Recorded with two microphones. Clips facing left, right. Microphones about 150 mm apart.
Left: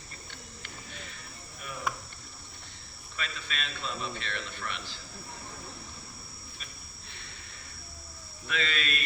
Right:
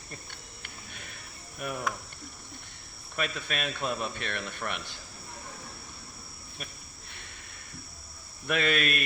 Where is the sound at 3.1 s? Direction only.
55° right (ahead or behind).